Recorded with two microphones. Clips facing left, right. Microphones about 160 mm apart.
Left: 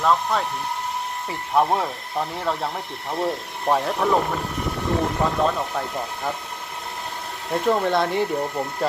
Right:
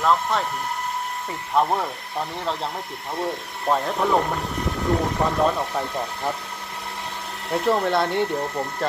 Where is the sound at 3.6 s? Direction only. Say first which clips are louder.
Left 1 dB; centre (ahead or behind).